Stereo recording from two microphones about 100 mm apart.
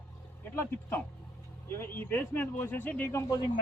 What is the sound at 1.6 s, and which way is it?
A man's voice, 25° left (ahead or behind).